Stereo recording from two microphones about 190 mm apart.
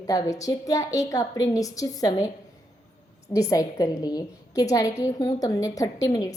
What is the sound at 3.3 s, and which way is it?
A woman's voice, 15° left (ahead or behind).